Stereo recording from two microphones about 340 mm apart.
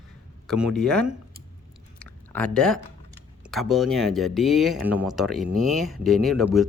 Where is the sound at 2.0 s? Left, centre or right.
Centre.